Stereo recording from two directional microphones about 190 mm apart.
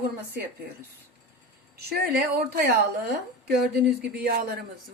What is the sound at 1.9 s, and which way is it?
A woman's voice, 55° right (ahead or behind).